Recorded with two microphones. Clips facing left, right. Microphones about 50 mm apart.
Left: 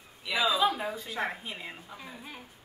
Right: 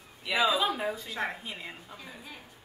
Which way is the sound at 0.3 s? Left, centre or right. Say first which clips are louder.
Right 2 dB; right.